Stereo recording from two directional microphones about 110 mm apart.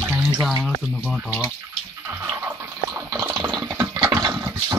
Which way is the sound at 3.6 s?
25° right (ahead or behind).